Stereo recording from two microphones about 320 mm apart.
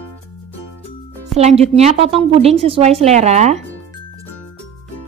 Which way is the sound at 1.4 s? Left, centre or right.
Centre.